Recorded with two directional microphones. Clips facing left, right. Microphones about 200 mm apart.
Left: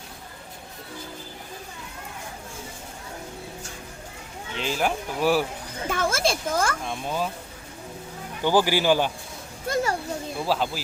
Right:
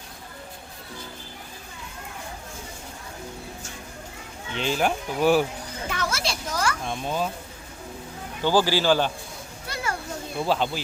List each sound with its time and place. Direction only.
4.5 s speech: centre (ahead or behind)
5.9 s speech: 50° left (ahead or behind)
6.8 s speech: centre (ahead or behind)
8.4 s a man's voice: 15° left (ahead or behind)
9.6 s children playing: 45° left (ahead or behind)
10.4 s speech: 5° left (ahead or behind)